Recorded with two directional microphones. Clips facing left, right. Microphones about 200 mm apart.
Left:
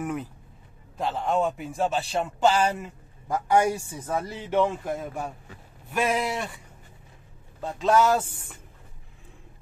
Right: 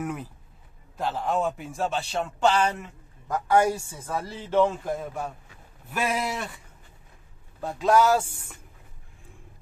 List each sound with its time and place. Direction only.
0.0 s speech: centre (ahead or behind)
3.5 s speech: 20° left (ahead or behind)
4.6 s speech: 5° left (ahead or behind)
7.6 s a man's voice: 10° right (ahead or behind)